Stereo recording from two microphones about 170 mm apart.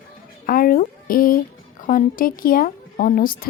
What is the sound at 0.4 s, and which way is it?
Speech, 55° left (ahead or behind).